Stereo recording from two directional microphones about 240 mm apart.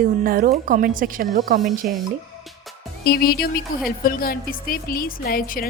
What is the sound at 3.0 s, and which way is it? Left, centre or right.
Speech, left.